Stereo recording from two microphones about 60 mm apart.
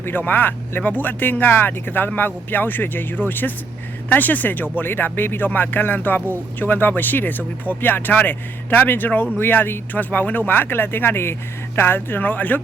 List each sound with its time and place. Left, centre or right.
0.0 s speech: left